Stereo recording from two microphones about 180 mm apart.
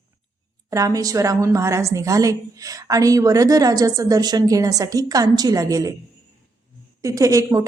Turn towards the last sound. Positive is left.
turn(degrees=-15)  # may be behind; listen again after turning